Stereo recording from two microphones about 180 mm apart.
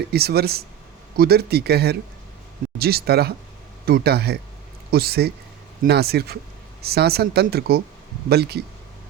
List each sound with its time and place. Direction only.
0.1 s speech: 60° right (ahead or behind)